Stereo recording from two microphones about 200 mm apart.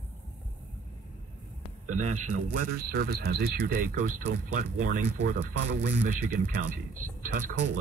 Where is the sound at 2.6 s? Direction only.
50° right (ahead or behind).